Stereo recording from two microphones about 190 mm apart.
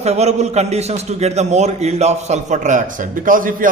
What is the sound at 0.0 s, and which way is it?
A man's voice, 35° right (ahead or behind).